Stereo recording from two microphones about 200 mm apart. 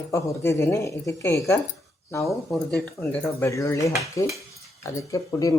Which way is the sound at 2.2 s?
Centre (ahead or behind).